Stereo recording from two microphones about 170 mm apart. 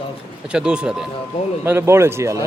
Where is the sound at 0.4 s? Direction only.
5° right (ahead or behind).